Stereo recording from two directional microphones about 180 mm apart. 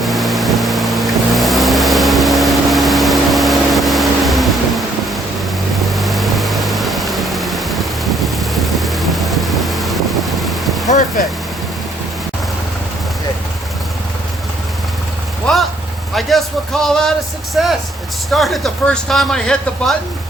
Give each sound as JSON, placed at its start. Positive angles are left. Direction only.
{"t": 0.0, "sound": "a sound", "side_deg": 0}
{"t": 5.9, "sound": "vehicle", "side_deg": 0}
{"t": 10.9, "sound": "vehicle", "side_deg": 45}
{"t": 15.5, "sound": "vehicle", "side_deg": 5}
{"t": 16.1, "sound": "a sound", "side_deg": 0}
{"t": 18.3, "sound": "speech", "side_deg": 0}